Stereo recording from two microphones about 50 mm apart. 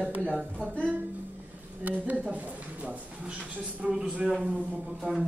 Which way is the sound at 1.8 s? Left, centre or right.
Right.